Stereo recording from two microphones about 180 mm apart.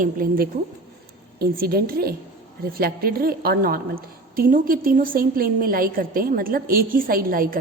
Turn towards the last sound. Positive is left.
turn(degrees=-55)  # may be behind; listen again after turning